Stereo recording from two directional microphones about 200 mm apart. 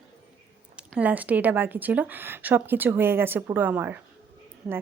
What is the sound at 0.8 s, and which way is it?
A woman's voice, 5° right (ahead or behind).